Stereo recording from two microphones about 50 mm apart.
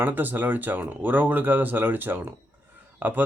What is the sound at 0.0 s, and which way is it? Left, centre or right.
Speech, right.